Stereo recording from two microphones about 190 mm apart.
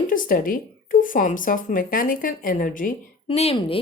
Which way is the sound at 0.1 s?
45° left (ahead or behind).